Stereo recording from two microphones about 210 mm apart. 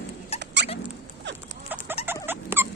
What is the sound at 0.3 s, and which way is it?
Rodents, 55° right (ahead or behind).